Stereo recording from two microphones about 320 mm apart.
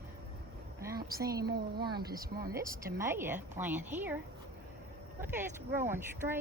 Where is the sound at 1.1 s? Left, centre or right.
Centre.